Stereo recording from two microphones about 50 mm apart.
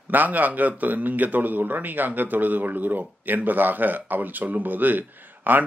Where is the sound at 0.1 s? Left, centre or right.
Right.